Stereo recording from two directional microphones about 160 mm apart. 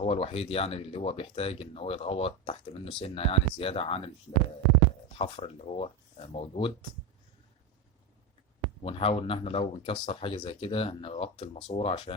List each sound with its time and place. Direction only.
0.0 s speech: 40° left (ahead or behind)
5.1 s speech: 40° left (ahead or behind)
8.8 s speech: 35° left (ahead or behind)